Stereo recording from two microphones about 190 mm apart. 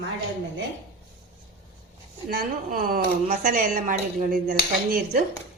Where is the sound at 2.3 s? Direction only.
50° right (ahead or behind).